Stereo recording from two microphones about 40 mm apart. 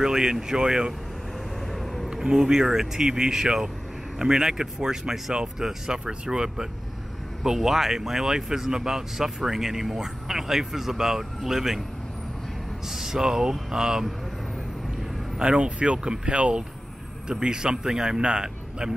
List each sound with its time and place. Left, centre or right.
0.0 s speech: centre
1.7 s a sound: centre
2.2 s speech: centre
12.8 s speech: centre
15.3 s speech: right